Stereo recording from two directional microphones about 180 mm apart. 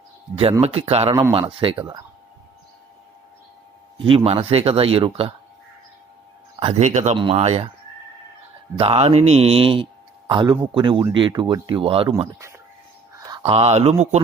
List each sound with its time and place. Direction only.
0.6 s speech: 35° right (ahead or behind)
4.0 s speech: 30° right (ahead or behind)
6.6 s speech: 35° right (ahead or behind)
8.7 s speech: 30° right (ahead or behind)
12.3 s speech: 15° right (ahead or behind)
13.1 s a sound: 20° right (ahead or behind)
13.4 s speech: 35° right (ahead or behind)